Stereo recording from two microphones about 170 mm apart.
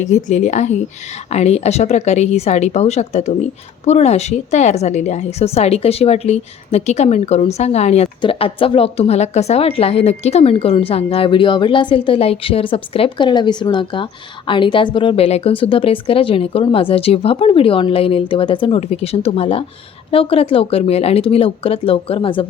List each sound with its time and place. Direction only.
0.0 s a woman's voice: 45° left (ahead or behind)